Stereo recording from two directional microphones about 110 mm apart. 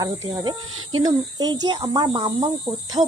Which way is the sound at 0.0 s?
40° right (ahead or behind).